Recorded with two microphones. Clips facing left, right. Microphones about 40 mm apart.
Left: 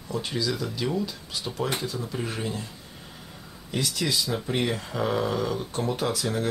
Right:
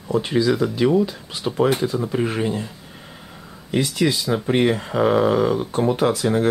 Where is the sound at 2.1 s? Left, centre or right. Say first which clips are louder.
Right 9 dB; right.